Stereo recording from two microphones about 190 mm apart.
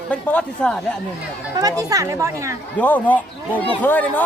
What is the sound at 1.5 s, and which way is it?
Speech, 20° right (ahead or behind).